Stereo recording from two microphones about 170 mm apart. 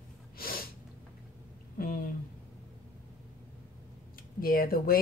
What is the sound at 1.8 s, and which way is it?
Speech, 60° left (ahead or behind).